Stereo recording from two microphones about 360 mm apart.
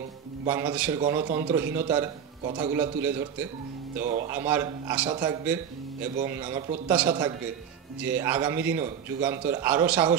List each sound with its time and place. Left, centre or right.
0.5 s a man's voice: centre
4.0 s a man's voice: centre
4.3 s a man's voice: centre